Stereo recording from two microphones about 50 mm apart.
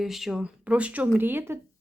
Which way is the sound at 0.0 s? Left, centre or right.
Centre.